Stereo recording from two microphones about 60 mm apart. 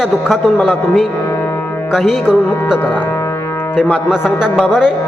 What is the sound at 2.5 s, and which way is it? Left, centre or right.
Speech, left.